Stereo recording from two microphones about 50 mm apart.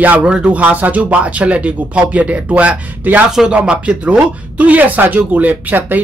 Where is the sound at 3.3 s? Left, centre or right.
Centre; by 6.0 s right.